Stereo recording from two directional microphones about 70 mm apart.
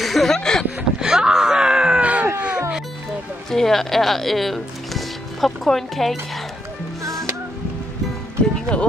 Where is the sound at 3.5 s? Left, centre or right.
Centre.